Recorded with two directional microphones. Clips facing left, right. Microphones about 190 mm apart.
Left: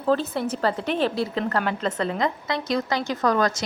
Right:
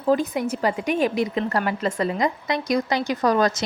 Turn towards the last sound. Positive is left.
turn(degrees=-20)  # may be behind; listen again after turning